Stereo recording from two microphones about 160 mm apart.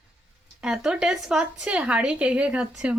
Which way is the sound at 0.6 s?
5° right (ahead or behind).